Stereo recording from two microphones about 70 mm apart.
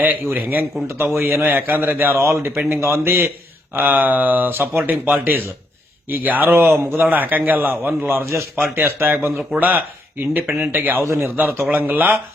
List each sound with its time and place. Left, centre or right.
0.0 s a man's voice: right
11.0 s speech: right
11.7 s a man's voice: right